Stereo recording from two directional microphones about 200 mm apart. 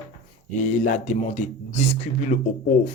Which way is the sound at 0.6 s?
35° left (ahead or behind).